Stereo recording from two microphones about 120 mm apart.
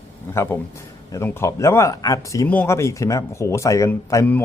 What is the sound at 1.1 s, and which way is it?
Speech, 20° left (ahead or behind).